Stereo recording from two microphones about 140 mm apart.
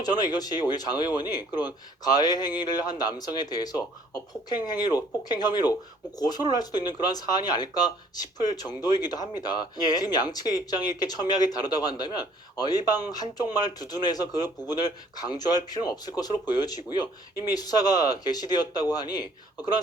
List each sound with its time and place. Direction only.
0.0 s speech: 30° left (ahead or behind)